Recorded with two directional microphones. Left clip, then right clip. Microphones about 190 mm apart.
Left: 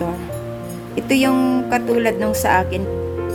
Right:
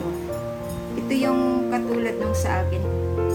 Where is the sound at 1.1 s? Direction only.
50° left (ahead or behind).